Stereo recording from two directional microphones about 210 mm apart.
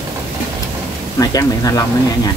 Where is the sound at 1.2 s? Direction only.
15° left (ahead or behind).